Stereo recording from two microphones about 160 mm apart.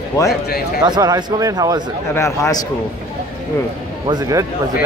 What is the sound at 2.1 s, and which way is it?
Speech, 20° left (ahead or behind).